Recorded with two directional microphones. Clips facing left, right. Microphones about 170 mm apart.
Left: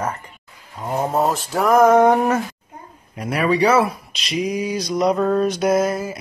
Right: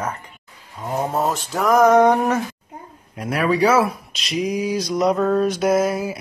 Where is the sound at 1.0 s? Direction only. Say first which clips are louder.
Left 3 dB; centre (ahead or behind).